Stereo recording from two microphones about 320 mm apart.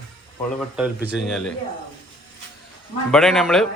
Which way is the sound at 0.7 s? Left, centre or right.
Centre.